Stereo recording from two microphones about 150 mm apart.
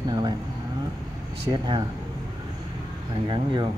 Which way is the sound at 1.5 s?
30° right (ahead or behind).